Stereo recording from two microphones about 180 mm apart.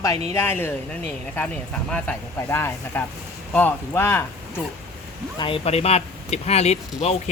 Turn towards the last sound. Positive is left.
turn(degrees=35)  # may be behind; listen again after turning